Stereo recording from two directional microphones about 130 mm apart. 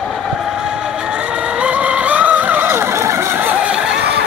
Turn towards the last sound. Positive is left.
turn(degrees=-20)  # may be behind; listen again after turning